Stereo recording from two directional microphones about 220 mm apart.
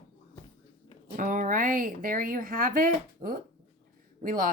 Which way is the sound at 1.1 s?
35° right (ahead or behind).